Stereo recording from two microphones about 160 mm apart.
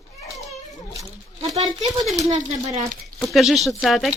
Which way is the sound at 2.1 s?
45° right (ahead or behind).